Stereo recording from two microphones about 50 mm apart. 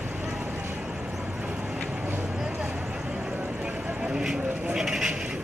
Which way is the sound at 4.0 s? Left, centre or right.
Centre.